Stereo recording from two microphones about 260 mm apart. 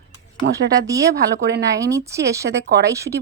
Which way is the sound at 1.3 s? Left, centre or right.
Right.